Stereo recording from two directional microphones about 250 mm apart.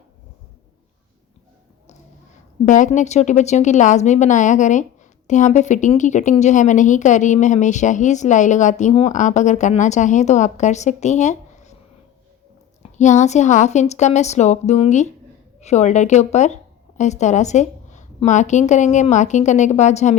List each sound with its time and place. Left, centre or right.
2.6 s a woman's voice: left
12.8 s a woman's voice: left